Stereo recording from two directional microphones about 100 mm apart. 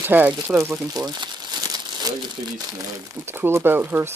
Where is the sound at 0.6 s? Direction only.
35° right (ahead or behind).